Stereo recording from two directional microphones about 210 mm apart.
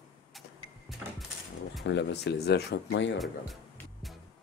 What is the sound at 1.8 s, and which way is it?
Speech, 55° left (ahead or behind).